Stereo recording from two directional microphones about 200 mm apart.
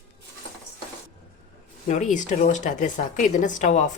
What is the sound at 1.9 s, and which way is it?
A woman's voice, 40° left (ahead or behind).